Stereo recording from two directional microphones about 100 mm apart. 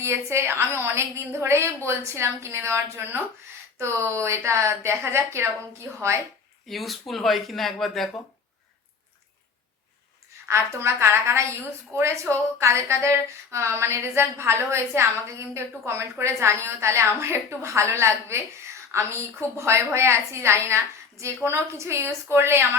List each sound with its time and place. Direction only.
0.0 s a woman's voice: 30° right (ahead or behind)
6.7 s speech: centre (ahead or behind)
10.5 s a woman's voice: 25° right (ahead or behind)